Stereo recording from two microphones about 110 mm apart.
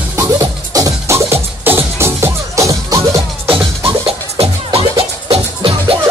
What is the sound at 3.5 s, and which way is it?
Music, 50° right (ahead or behind).